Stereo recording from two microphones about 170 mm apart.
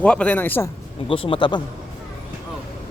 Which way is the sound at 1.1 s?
30° left (ahead or behind).